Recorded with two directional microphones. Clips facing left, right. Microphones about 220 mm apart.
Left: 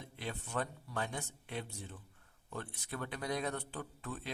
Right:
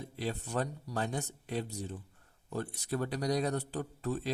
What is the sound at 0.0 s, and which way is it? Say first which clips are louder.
A man's voice: right 7 dB; 35° right (ahead or behind).